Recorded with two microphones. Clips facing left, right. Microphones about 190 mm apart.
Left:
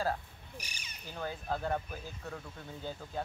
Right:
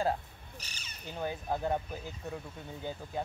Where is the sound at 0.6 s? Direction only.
10° left (ahead or behind).